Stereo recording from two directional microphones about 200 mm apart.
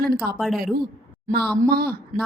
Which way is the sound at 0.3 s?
Centre (ahead or behind).